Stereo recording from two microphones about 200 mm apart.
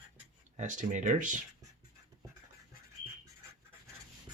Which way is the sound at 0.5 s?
35° right (ahead or behind).